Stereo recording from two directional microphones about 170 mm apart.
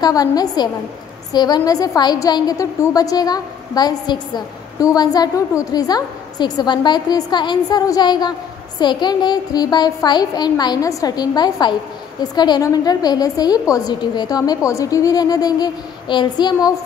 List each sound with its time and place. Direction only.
0.0 s a woman's voice: 20° left (ahead or behind)